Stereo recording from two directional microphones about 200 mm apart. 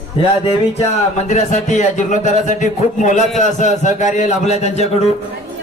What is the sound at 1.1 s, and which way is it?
Speech, 35° left (ahead or behind).